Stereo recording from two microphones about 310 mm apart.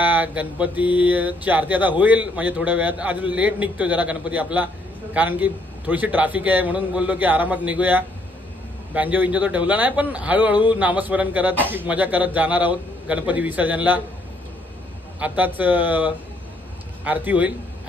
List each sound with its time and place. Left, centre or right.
0.0 s speech: centre
15.1 s speech: centre